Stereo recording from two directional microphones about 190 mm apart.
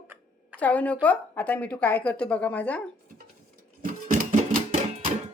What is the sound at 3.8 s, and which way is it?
Music, 45° right (ahead or behind).